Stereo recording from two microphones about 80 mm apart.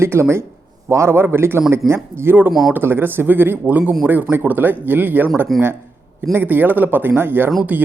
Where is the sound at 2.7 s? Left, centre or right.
Right.